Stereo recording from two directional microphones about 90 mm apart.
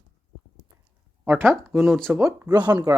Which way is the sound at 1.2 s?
25° right (ahead or behind).